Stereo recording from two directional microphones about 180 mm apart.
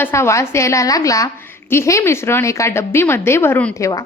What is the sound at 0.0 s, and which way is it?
A woman's voice, 15° left (ahead or behind).